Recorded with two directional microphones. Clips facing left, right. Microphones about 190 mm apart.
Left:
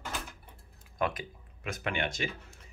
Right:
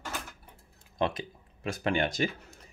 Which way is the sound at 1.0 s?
25° right (ahead or behind).